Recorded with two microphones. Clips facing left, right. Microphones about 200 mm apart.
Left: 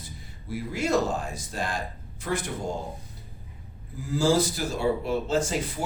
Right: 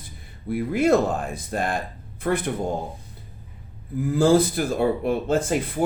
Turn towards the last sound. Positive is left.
turn(degrees=-55)  # may be behind; listen again after turning